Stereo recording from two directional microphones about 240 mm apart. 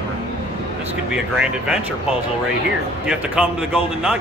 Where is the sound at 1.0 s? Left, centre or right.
Centre.